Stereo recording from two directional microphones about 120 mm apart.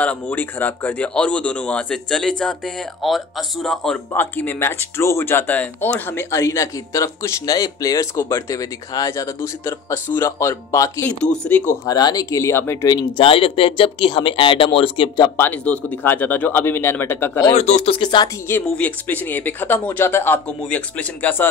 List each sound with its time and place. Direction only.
0.0 s speech: 10° left (ahead or behind)
4.1 s speech: 15° left (ahead or behind)
11.1 s speech: 10° left (ahead or behind)
11.8 s speech: 35° left (ahead or behind)
13.2 s speech: 50° left (ahead or behind)
15.3 s speech: 15° left (ahead or behind)
17.6 s speech: 65° left (ahead or behind); by 18.3 s 40° left (ahead or behind)
18.5 s speech: 10° left (ahead or behind)